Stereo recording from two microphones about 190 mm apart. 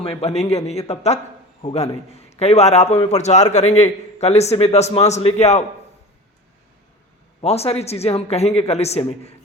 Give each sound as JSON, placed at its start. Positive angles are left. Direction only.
{"t": 0.0, "sound": "a man's voice", "side_deg": 35}
{"t": 7.4, "sound": "a man's voice", "side_deg": 35}